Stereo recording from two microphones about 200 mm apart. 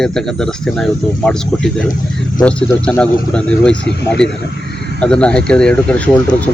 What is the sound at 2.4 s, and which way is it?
Speech, 5° left (ahead or behind).